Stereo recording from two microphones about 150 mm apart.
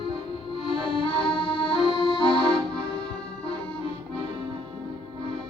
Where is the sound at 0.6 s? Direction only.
35° left (ahead or behind).